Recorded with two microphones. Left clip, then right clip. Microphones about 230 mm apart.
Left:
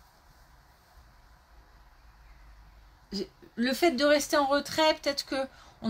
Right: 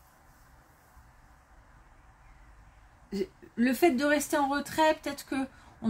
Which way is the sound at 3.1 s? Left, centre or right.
Left.